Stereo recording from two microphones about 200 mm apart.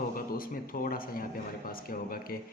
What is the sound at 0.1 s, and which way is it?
Speech, 45° left (ahead or behind).